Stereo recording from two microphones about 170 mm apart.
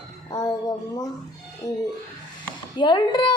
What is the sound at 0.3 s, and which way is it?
Music, 25° left (ahead or behind).